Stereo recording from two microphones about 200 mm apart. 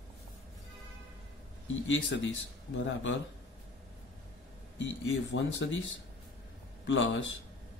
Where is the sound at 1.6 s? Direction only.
70° left (ahead or behind).